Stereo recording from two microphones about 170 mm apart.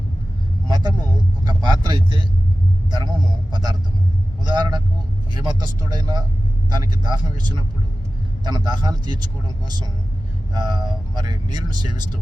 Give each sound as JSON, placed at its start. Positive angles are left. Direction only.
{"t": 0.7, "sound": "vehicle", "side_deg": -25}
{"t": 1.5, "sound": "speech", "side_deg": -25}